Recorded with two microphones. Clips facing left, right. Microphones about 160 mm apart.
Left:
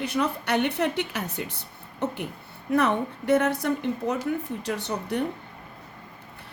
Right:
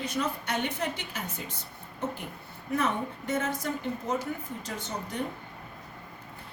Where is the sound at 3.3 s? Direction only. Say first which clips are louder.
Left 9 dB; 65° left (ahead or behind).